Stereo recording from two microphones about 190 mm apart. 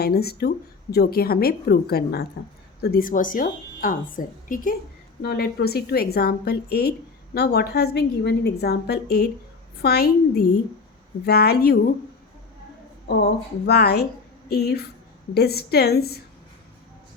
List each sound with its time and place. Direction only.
0.0 s a woman's voice: 55° left (ahead or behind)
5.2 s a woman's voice: 55° left (ahead or behind)
13.7 s a woman's voice: 60° left (ahead or behind)